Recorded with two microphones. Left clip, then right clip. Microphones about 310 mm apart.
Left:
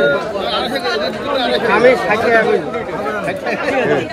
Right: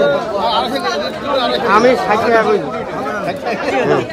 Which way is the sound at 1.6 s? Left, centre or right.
Right.